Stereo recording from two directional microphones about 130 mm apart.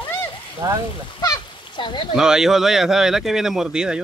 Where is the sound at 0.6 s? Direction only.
25° right (ahead or behind).